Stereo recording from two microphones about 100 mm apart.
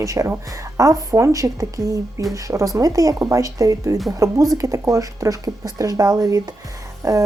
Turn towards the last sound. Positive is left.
turn(degrees=-35)  # may be behind; listen again after turning